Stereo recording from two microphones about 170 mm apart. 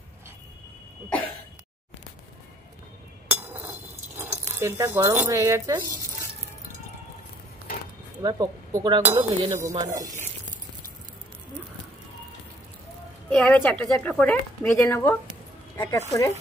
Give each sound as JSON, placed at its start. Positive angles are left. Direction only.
{"t": 3.3, "sound": "a sound", "side_deg": -10}
{"t": 4.2, "sound": "speech", "side_deg": -15}
{"t": 8.2, "sound": "chink", "side_deg": -20}
{"t": 13.3, "sound": "a woman's voice", "side_deg": 5}
{"t": 14.8, "sound": "speech", "side_deg": 15}